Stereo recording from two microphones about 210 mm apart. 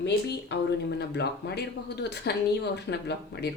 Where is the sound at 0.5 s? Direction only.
55° left (ahead or behind).